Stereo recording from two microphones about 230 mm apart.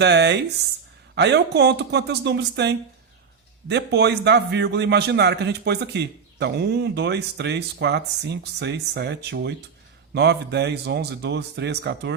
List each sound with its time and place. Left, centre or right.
0.0 s a man's voice: right